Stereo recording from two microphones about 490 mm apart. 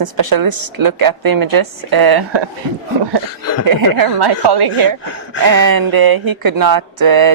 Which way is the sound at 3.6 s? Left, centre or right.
Right.